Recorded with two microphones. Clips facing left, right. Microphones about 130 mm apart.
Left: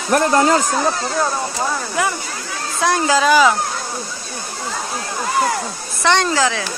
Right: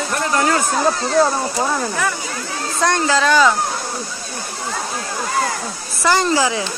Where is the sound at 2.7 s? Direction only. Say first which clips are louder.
Left 1 dB; 5° left (ahead or behind).